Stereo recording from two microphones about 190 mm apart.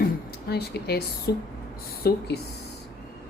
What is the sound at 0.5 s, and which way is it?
Speech, 55° left (ahead or behind).